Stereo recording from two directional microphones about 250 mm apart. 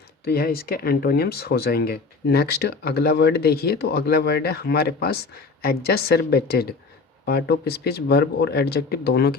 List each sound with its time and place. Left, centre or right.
0.3 s speech: left